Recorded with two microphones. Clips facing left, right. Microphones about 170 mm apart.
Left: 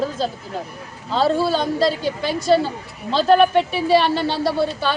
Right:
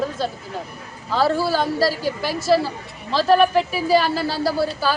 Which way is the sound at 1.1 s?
25° left (ahead or behind).